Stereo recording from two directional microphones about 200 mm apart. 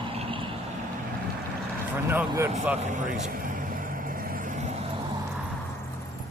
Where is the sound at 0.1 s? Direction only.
25° right (ahead or behind).